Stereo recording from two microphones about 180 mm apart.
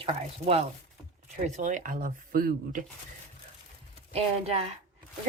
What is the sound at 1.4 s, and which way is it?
Speech, 40° right (ahead or behind).